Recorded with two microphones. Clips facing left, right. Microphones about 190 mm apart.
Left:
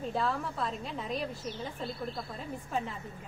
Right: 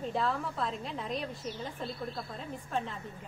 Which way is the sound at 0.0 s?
Centre (ahead or behind).